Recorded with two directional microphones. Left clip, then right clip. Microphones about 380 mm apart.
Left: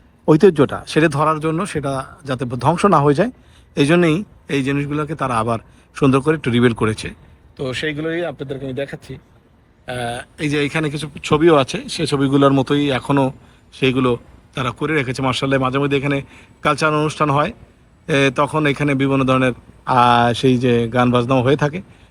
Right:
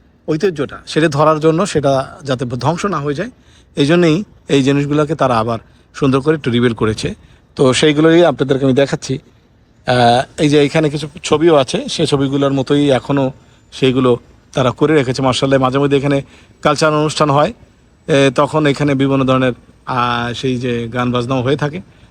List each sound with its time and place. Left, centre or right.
0.3 s speech: centre
8.4 s speech: right
10.3 s speech: centre